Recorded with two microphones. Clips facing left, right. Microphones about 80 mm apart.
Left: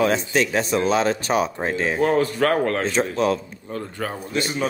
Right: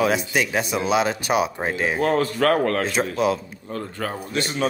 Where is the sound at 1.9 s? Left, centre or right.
Left.